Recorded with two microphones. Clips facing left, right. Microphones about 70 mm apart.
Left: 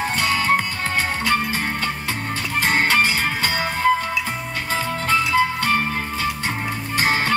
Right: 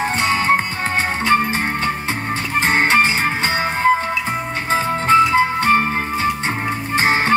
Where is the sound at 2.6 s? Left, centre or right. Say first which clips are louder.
Right 3 dB; right.